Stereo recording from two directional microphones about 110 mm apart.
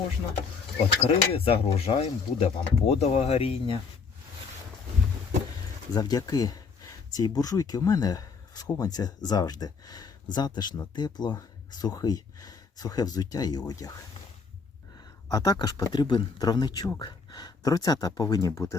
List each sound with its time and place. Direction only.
1.0 s speech: 65° left (ahead or behind)
5.9 s speech: 35° left (ahead or behind)
14.9 s a sound: 35° left (ahead or behind)
15.5 s speech: 40° left (ahead or behind)